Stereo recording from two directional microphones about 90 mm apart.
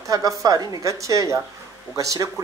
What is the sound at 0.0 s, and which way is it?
Speech, 40° right (ahead or behind).